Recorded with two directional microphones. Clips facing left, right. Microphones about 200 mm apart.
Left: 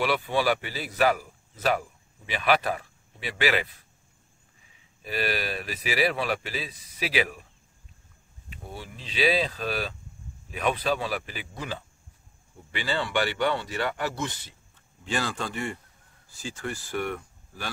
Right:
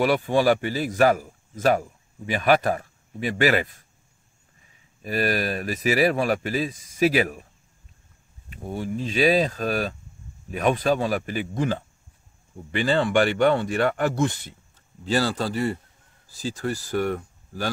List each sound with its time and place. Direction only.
0.0 s a man's voice: 45° right (ahead or behind)
5.0 s speech: 45° right (ahead or behind)
8.5 s speech: 45° right (ahead or behind)
15.0 s a man's voice: 35° right (ahead or behind)